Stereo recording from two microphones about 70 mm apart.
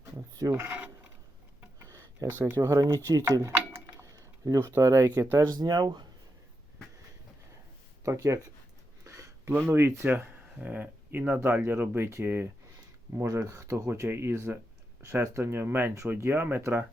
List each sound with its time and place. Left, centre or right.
0.3 s speech: right
1.6 s a sound: right
2.4 s speech: right
4.0 s a sound: right
4.7 s speech: right
5.0 s speech: right
5.5 s speech: right
8.0 s speech: right
9.0 s a sound: right
10.1 s speech: right
11.3 s speech: right
13.1 s speech: right